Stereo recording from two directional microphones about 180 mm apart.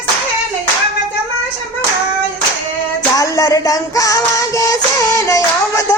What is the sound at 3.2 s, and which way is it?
Child singing, 20° left (ahead or behind).